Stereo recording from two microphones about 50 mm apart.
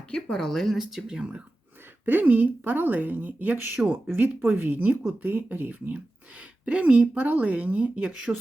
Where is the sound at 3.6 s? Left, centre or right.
Right.